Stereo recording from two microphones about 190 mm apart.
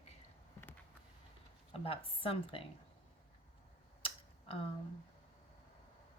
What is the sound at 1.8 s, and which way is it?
Speech, 30° left (ahead or behind).